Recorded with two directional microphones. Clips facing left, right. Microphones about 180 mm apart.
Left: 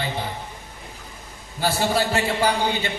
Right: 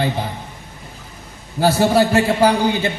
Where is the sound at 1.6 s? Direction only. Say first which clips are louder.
Right 8 dB; 60° right (ahead or behind).